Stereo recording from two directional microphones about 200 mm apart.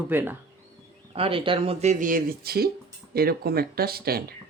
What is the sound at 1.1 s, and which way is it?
Speech, 30° right (ahead or behind).